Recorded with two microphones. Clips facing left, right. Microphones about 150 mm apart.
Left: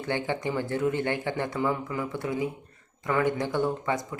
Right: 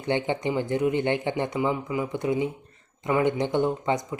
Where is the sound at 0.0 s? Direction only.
20° right (ahead or behind).